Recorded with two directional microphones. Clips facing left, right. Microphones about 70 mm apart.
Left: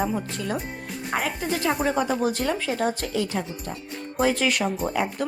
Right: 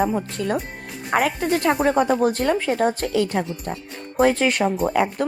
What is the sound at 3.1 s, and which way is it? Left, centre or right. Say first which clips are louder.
Speech: right 5 dB; right.